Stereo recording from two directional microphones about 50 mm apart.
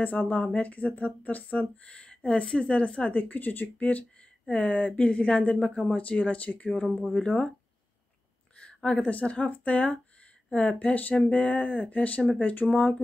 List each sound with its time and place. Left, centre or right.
0.0 s speech: left
3.1 s speech: left
3.7 s speech: left
6.8 s speech: centre
8.5 s a sound: left
9.2 s speech: left
12.6 s speech: left